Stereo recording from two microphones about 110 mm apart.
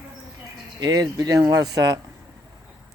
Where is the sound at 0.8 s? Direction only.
35° right (ahead or behind).